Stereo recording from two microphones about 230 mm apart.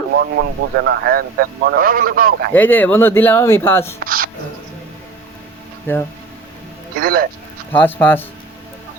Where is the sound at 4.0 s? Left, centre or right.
Right.